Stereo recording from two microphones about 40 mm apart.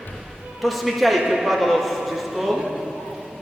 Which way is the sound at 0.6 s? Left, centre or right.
Centre.